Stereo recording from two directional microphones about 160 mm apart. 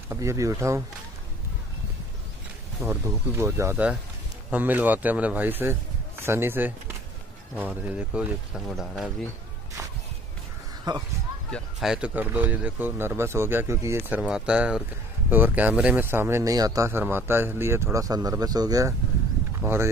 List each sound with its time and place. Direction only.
0.1 s speech: 20° right (ahead or behind)
2.9 s speech: 15° right (ahead or behind); by 9.1 s centre (ahead or behind)
10.9 s speech: 25° right (ahead or behind)
11.5 s speech: 5° right (ahead or behind)